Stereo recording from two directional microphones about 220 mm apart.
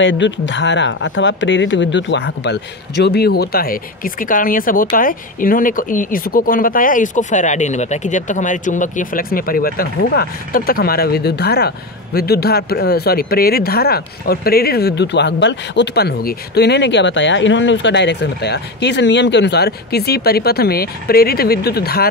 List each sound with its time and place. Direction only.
0.0 s speech: 55° left (ahead or behind)